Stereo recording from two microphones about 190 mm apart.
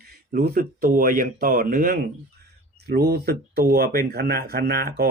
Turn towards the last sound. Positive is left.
turn(degrees=-55)  # may be behind; listen again after turning